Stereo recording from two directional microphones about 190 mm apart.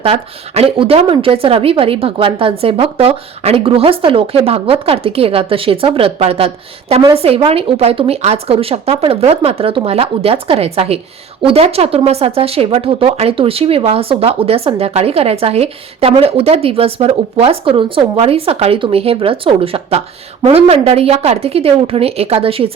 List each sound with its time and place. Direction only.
0.0 s a woman's voice: 30° right (ahead or behind)